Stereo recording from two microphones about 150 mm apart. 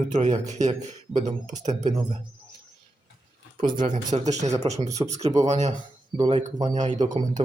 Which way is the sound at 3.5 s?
60° right (ahead or behind).